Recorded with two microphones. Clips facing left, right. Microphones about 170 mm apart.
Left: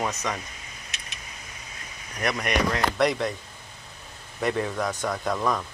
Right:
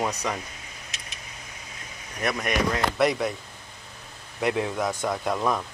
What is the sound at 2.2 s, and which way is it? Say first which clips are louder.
Speech: even; centre (ahead or behind).